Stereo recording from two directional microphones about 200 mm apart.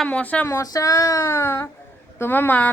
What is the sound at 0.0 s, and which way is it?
A woman's voice, 5° left (ahead or behind).